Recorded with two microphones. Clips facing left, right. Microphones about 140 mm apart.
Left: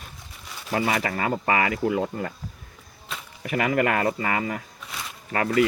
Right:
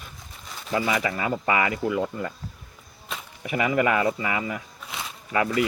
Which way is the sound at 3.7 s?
50° left (ahead or behind).